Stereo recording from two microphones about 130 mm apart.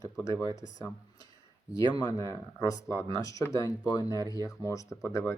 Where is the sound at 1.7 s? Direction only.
30° left (ahead or behind).